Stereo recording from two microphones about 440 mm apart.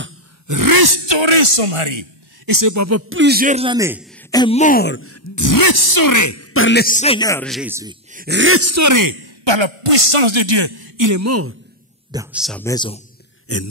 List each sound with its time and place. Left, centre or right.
0.5 s speech: right
2.4 s speech: right; by 4.1 s centre
4.3 s speech: centre; by 11.5 s right
12.1 s speech: centre
13.5 s a sound: left